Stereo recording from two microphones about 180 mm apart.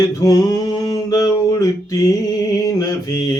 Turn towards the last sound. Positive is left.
turn(degrees=20)  # may be behind; listen again after turning